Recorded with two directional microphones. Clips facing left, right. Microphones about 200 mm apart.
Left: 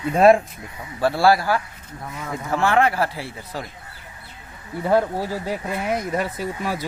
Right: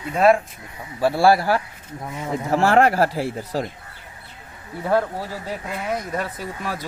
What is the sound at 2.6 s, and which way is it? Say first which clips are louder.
Speech: right 2 dB; 40° right (ahead or behind).